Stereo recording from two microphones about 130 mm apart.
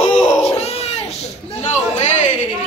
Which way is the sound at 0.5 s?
50° left (ahead or behind).